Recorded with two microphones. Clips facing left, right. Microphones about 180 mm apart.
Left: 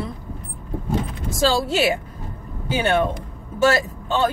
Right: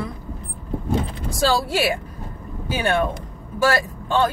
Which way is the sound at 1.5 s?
25° left (ahead or behind).